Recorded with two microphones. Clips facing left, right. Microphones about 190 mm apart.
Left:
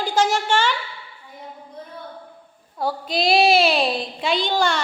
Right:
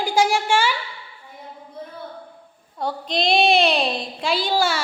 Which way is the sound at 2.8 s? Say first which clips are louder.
Left 1 dB; 5° left (ahead or behind).